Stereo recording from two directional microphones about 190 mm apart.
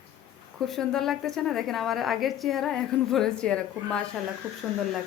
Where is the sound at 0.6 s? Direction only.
Centre (ahead or behind).